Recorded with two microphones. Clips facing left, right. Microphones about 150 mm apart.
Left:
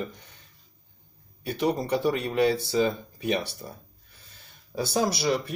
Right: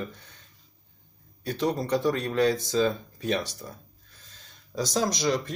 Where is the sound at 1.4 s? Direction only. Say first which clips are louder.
Left 1 dB; 10° left (ahead or behind).